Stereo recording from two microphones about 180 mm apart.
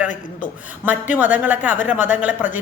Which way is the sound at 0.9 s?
10° right (ahead or behind).